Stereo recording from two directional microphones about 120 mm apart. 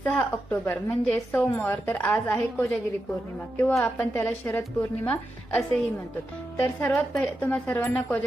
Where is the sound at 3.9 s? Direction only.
15° left (ahead or behind).